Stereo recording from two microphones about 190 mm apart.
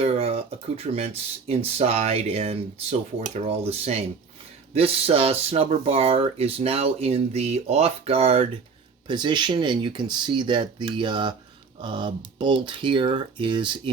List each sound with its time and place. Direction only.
0.0 s speech: 30° right (ahead or behind)